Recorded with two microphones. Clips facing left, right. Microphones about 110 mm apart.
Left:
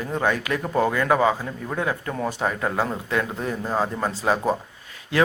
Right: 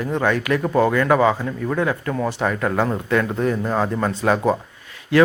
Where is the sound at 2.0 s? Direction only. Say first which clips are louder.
Right 4 dB; 35° right (ahead or behind).